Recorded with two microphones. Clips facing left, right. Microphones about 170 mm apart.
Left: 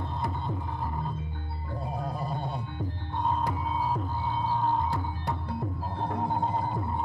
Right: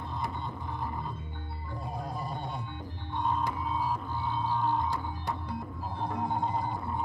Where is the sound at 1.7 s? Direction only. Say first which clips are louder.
Left 4 dB; 60° left (ahead or behind).